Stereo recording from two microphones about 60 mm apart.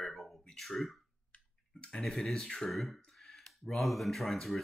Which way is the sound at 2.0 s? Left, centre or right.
Centre.